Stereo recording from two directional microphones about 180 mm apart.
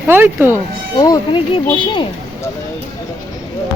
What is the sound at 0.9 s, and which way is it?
Speech, 20° left (ahead or behind).